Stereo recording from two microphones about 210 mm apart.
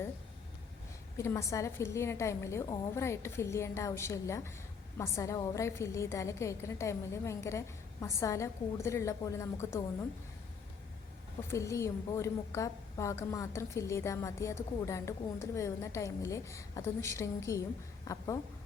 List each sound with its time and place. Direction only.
1.1 s a woman's voice: 15° left (ahead or behind)
11.5 s a woman's voice: 15° left (ahead or behind)